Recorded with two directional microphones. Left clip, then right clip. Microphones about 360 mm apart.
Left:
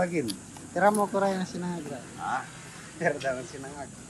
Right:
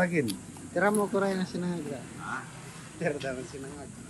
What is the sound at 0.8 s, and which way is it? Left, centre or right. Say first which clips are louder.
Speech: left 3 dB; centre.